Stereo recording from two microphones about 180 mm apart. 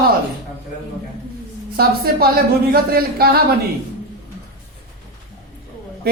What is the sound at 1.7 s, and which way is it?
Speech, 55° right (ahead or behind).